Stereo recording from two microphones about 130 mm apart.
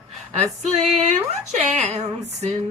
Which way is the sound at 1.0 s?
65° right (ahead or behind).